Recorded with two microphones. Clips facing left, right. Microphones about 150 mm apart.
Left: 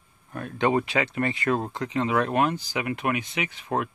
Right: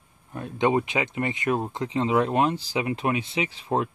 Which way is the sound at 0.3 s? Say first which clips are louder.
Right 1 dB; 20° right (ahead or behind).